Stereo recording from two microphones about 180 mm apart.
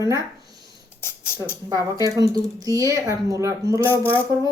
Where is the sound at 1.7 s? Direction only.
20° right (ahead or behind).